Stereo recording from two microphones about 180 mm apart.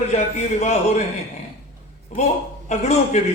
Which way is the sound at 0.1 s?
40° left (ahead or behind).